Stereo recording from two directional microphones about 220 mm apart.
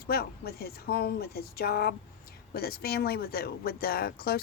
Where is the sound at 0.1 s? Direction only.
45° left (ahead or behind).